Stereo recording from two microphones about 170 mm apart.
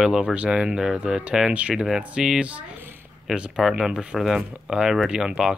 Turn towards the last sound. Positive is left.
turn(degrees=-5)  # may be behind; listen again after turning